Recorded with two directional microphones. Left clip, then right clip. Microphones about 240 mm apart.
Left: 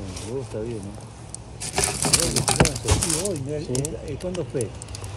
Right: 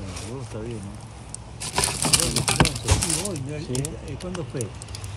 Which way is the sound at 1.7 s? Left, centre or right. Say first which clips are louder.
Even; centre.